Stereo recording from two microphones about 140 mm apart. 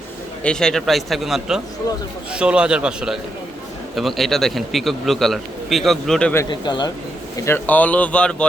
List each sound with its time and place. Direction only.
0.4 s a man's voice: 5° left (ahead or behind)
6.5 s speech: 30° left (ahead or behind)
7.4 s speech: 15° left (ahead or behind)